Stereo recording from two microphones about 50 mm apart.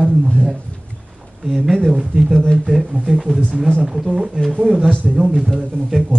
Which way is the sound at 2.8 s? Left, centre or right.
Centre.